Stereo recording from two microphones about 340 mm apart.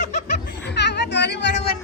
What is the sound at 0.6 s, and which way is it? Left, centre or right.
Speech, left.